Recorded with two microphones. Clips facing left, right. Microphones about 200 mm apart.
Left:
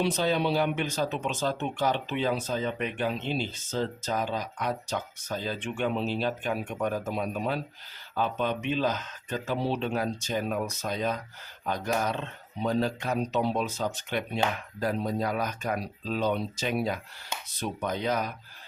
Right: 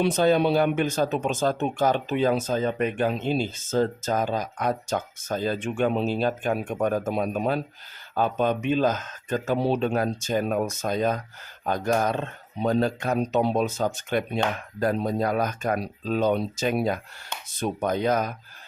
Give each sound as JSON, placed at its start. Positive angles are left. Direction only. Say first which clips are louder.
{"t": 0.0, "sound": "speech", "louder": "right 6 dB", "side_deg": -50}